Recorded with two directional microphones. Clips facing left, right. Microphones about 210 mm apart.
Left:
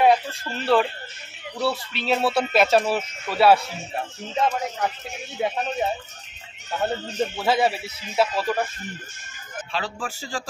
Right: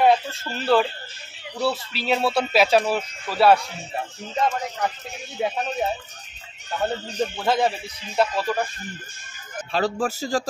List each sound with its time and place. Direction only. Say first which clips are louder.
0.0 s speech: even; centre (ahead or behind)
9.7 s speech: right 8 dB; 40° right (ahead or behind)